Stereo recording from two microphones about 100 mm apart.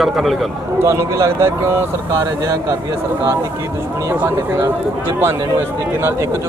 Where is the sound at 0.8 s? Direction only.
25° right (ahead or behind).